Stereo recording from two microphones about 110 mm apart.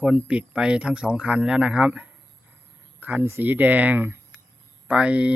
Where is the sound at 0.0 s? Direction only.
10° right (ahead or behind).